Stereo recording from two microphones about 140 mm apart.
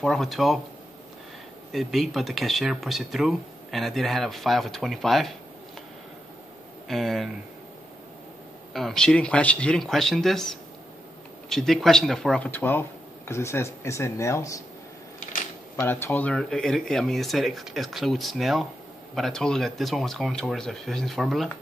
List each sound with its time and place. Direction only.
0.0 s speech: centre (ahead or behind)
1.7 s speech: centre (ahead or behind)
6.9 s speech: centre (ahead or behind)
8.7 s speech: 5° left (ahead or behind); by 14.6 s 20° left (ahead or behind)
15.7 s speech: 15° left (ahead or behind); by 21.5 s centre (ahead or behind)